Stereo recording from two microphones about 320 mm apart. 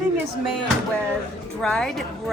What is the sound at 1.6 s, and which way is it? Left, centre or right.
Speech, centre.